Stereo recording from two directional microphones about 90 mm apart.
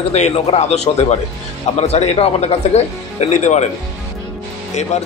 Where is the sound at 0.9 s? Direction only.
90° left.